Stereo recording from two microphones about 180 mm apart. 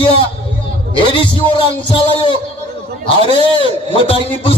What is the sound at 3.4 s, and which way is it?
Speech, 30° left (ahead or behind).